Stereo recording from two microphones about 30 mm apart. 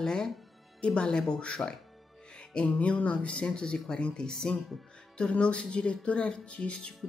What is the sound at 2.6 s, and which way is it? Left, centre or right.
Speech, left.